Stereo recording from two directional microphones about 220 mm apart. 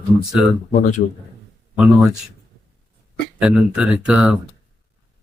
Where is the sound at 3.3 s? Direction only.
5° right (ahead or behind).